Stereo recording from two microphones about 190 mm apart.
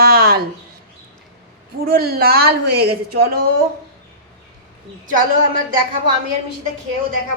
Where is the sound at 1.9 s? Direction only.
55° right (ahead or behind).